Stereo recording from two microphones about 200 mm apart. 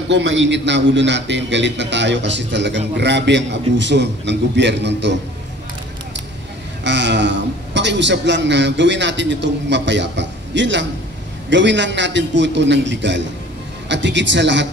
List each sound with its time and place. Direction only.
0.1 s a man's voice: 70° right (ahead or behind)
6.8 s a man's voice: 60° right (ahead or behind)